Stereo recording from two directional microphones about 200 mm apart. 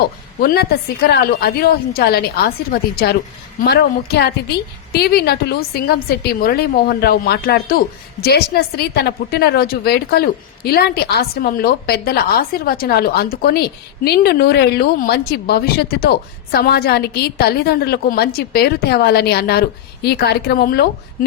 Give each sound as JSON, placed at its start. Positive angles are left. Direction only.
{"t": 0.3, "sound": "a woman's voice", "side_deg": 50}